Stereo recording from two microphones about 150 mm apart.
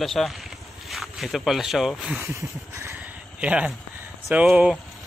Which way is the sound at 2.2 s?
20° right (ahead or behind).